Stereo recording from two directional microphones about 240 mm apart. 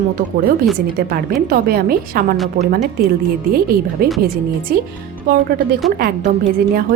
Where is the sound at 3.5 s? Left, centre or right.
Right.